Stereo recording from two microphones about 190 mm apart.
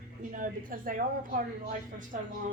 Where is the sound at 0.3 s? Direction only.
45° right (ahead or behind).